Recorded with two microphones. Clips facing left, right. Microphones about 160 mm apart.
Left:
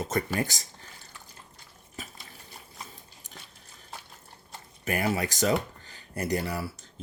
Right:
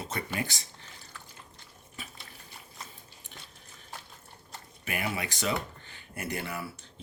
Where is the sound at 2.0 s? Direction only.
40° left (ahead or behind).